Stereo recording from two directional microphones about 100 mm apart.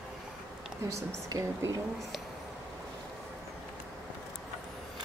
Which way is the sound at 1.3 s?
35° right (ahead or behind).